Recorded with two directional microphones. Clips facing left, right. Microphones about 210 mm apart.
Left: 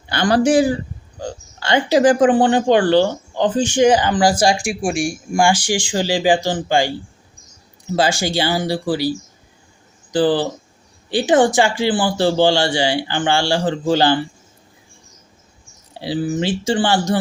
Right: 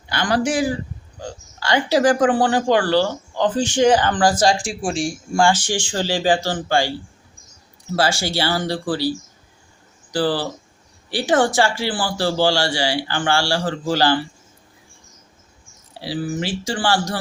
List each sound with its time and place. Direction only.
0.1 s a man's voice: 30° left (ahead or behind)
7.9 s speech: 15° left (ahead or behind)
16.0 s speech: 25° left (ahead or behind)